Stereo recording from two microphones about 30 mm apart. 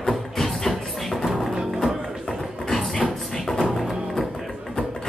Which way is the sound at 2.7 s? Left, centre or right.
Centre.